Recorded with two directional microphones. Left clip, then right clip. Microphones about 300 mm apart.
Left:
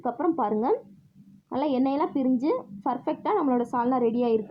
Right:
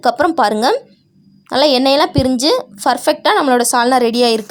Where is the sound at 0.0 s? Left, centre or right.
Right.